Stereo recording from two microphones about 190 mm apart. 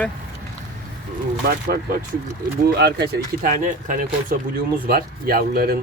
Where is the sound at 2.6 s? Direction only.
60° right (ahead or behind).